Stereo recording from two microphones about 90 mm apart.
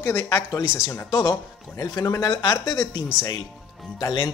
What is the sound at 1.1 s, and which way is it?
Speech, 50° left (ahead or behind).